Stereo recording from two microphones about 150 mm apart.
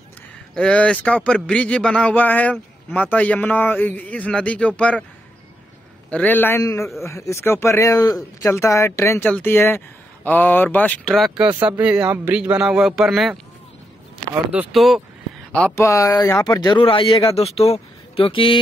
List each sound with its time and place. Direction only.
0.6 s a man's voice: 5° left (ahead or behind)
6.0 s a man's voice: 10° left (ahead or behind)
11.4 s speech: 10° right (ahead or behind)
14.5 s speech: 5° right (ahead or behind)
15.8 s speech: 20° left (ahead or behind)